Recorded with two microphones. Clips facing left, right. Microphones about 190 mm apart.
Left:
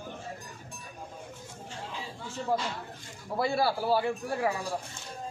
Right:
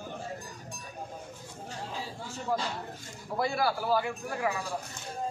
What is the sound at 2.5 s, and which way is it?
A man's voice, 25° left (ahead or behind).